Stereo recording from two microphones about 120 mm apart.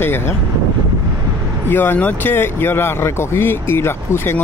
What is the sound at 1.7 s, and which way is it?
Speech, 15° left (ahead or behind).